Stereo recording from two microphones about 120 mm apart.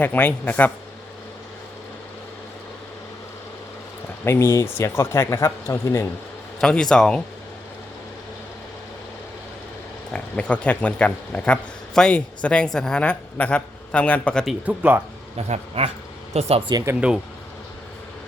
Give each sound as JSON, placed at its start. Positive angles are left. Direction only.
{"t": 0.0, "sound": "a man's voice", "side_deg": 15}
{"t": 4.2, "sound": "speech", "side_deg": 20}
{"t": 6.6, "sound": "speech", "side_deg": 5}
{"t": 10.1, "sound": "speech", "side_deg": 10}
{"t": 14.6, "sound": "speech", "side_deg": -10}
{"t": 15.4, "sound": "speech", "side_deg": -60}